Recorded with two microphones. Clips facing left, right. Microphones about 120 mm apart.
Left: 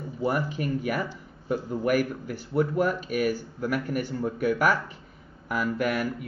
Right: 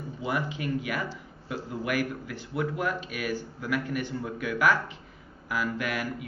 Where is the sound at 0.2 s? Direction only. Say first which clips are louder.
Left 4 dB; 45° left (ahead or behind).